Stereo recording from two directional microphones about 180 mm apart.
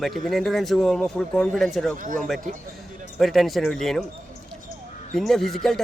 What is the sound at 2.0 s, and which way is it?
Speech, 45° right (ahead or behind).